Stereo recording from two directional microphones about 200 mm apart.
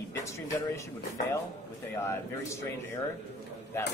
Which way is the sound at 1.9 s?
15° left (ahead or behind).